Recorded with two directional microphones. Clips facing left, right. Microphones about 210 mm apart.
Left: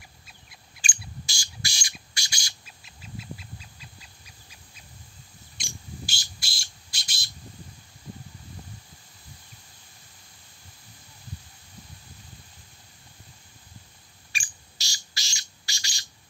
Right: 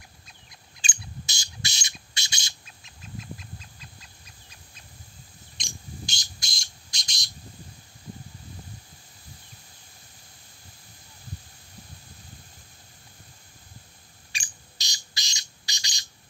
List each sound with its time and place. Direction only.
0.7 s bird: 20° right (ahead or behind)
2.6 s duck: 10° left (ahead or behind)
5.6 s bird: 5° left (ahead or behind)
14.3 s bird: 20° right (ahead or behind)